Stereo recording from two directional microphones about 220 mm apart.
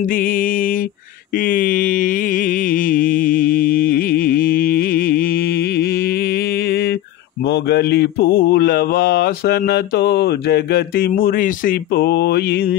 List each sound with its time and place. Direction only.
0.1 s mantra: 40° left (ahead or behind)
1.4 s music: 40° left (ahead or behind)
7.4 s mantra: 50° left (ahead or behind)